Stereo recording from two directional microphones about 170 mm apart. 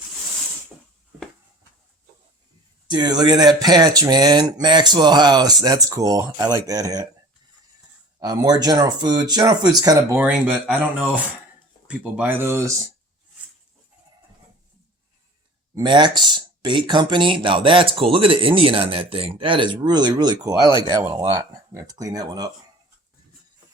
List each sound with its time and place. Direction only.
2.8 s speech: 25° right (ahead or behind)
8.2 s speech: 20° right (ahead or behind)
10.2 s speech: 10° right (ahead or behind)
15.7 s speech: 25° right (ahead or behind)